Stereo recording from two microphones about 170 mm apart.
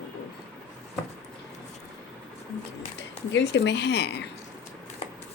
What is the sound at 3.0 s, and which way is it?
Speech, 90° left.